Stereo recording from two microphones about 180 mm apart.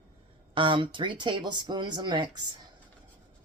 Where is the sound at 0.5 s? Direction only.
30° right (ahead or behind).